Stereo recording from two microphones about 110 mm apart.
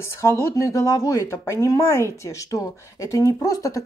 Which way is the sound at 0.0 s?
25° left (ahead or behind).